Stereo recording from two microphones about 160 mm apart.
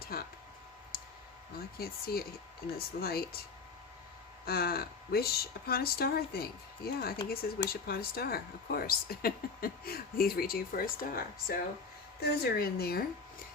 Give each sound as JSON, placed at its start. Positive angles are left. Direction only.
{"t": 0.0, "sound": "a sound", "side_deg": 70}
{"t": 1.5, "sound": "speech", "side_deg": 70}
{"t": 4.4, "sound": "speech", "side_deg": 70}